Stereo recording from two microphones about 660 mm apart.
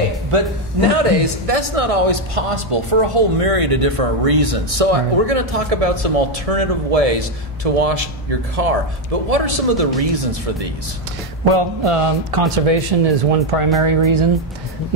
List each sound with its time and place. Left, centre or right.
0.3 s a man's voice: right